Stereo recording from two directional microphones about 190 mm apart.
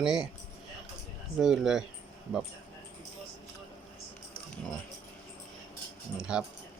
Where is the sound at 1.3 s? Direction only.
Centre (ahead or behind).